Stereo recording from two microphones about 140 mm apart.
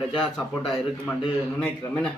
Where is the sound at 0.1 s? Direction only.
Centre (ahead or behind).